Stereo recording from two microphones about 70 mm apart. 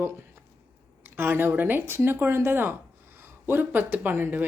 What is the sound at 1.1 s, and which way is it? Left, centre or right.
Speech, right.